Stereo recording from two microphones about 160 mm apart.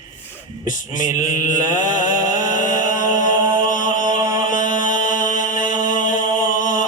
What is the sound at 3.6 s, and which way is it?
Music, 55° left (ahead or behind).